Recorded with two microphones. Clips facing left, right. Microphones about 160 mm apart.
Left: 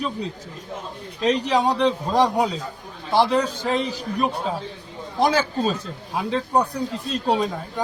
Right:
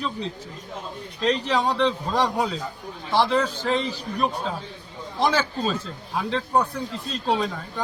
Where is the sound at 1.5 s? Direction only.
15° left (ahead or behind).